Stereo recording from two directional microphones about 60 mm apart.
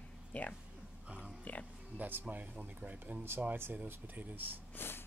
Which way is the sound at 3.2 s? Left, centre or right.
Right.